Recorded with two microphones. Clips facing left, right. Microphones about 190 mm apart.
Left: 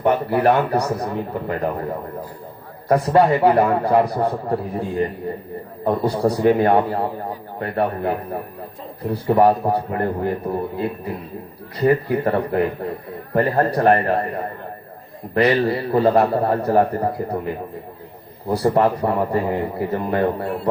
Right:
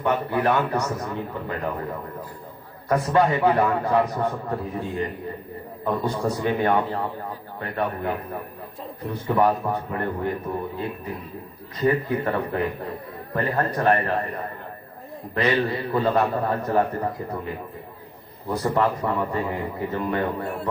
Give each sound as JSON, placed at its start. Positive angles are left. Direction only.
{"t": 0.0, "sound": "a man's voice", "side_deg": 35}
{"t": 12.1, "sound": "a man's voice", "side_deg": 35}